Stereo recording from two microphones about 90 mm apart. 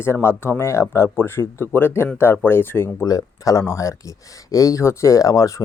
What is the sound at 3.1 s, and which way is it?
Speech, 40° left (ahead or behind).